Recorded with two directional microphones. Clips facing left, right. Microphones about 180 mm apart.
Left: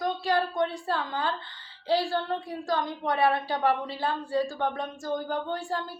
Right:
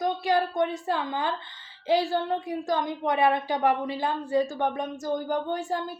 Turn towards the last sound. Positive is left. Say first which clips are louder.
# right 3 dB
turn(degrees=-20)  # may be behind; listen again after turning